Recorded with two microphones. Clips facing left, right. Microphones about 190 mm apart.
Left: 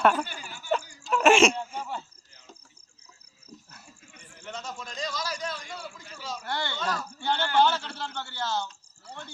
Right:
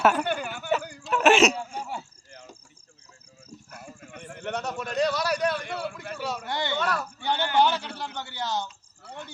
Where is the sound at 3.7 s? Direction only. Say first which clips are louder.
Right 10 dB; 55° right (ahead or behind).